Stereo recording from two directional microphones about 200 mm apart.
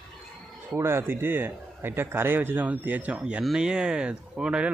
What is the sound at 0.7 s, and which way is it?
Speech, 10° right (ahead or behind).